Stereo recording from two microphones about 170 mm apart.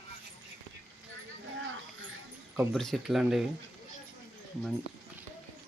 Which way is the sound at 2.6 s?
Centre (ahead or behind).